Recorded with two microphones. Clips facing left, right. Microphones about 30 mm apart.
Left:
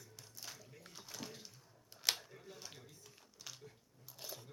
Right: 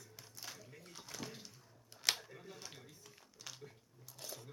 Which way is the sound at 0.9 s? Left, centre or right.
Centre.